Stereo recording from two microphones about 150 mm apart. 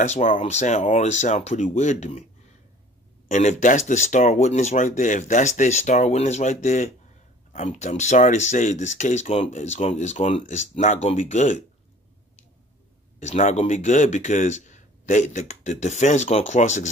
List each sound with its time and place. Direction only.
0.0 s speech: 55° left (ahead or behind)
3.3 s speech: 55° left (ahead or behind)
13.2 s speech: 50° left (ahead or behind)